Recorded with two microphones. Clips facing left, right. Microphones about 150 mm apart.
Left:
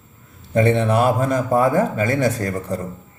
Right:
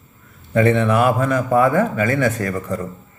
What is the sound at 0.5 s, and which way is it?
Speech, 30° left (ahead or behind).